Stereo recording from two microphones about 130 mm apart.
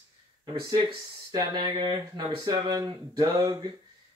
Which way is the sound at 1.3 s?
35° right (ahead or behind).